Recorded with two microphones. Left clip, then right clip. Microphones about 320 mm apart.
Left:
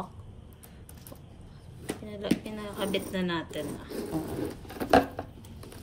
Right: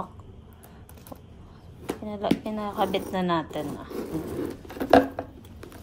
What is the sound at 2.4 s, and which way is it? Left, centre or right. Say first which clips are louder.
Speech: right 7 dB; centre.